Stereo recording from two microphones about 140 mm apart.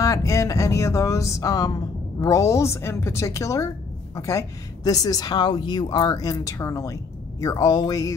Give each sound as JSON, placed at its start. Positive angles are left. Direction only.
{"t": 0.0, "sound": "a woman's voice", "side_deg": 25}